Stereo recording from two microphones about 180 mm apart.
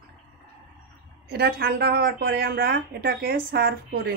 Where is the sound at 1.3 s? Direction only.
60° right (ahead or behind).